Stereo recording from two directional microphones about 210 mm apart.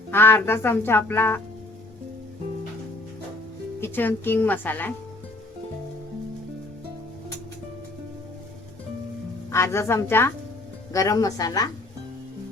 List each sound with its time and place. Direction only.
0.1 s speech: 10° left (ahead or behind)
3.8 s speech: 10° left (ahead or behind)
9.5 s speech: 15° left (ahead or behind)